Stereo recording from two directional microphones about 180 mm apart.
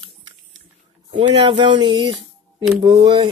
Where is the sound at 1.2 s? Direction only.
25° right (ahead or behind).